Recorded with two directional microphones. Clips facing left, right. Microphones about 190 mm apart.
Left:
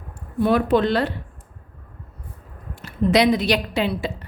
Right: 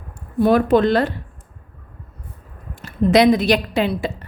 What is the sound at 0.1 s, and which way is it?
Speech, 40° right (ahead or behind).